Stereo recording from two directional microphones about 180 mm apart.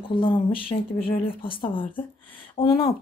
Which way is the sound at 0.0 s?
30° left (ahead or behind).